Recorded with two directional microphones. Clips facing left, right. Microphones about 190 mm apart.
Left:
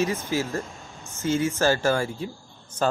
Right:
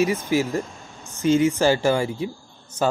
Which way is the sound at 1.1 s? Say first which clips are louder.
Right 6 dB; 15° right (ahead or behind).